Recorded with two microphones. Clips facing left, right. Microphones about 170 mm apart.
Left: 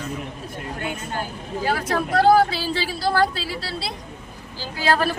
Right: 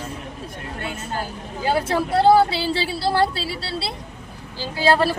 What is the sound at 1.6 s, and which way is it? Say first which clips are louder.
Speech: right 3 dB; 25° right (ahead or behind).